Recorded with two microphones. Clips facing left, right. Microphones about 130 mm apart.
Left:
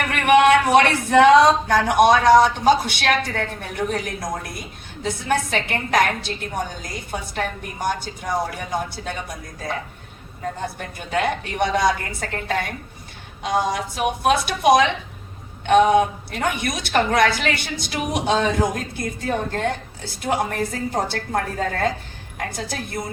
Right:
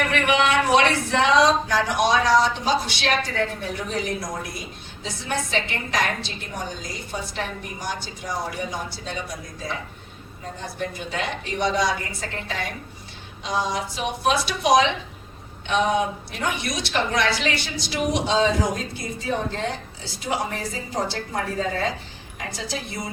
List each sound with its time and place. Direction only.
0.1 s speech: 55° left (ahead or behind)
10.8 s speech: 55° left (ahead or behind)